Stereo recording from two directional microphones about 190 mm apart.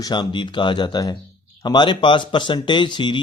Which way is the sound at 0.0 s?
25° left (ahead or behind).